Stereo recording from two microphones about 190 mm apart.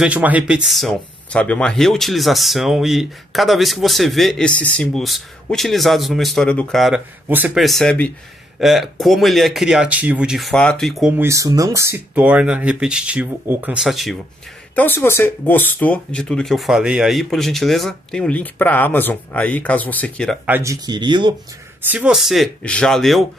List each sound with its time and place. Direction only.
0.0 s speech: 10° right (ahead or behind)
14.8 s speech: 10° left (ahead or behind)
20.4 s speech: 15° right (ahead or behind)
21.8 s speech: 5° right (ahead or behind)